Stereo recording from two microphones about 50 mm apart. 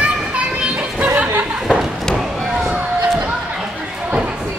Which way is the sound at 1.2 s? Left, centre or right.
Right.